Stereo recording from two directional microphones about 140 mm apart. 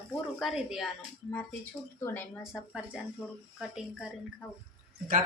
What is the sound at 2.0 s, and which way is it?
Speech, 15° left (ahead or behind).